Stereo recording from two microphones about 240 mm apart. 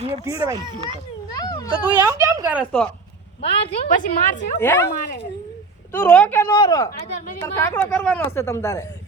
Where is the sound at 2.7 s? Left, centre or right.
Centre.